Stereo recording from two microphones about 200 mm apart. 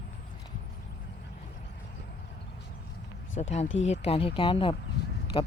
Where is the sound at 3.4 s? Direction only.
30° left (ahead or behind).